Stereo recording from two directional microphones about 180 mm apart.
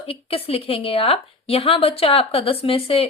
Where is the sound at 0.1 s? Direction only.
30° left (ahead or behind).